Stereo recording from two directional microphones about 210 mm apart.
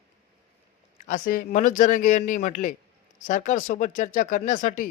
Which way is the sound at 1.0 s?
40° left (ahead or behind).